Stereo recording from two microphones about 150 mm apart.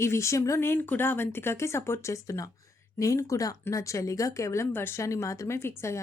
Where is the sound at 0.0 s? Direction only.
20° left (ahead or behind).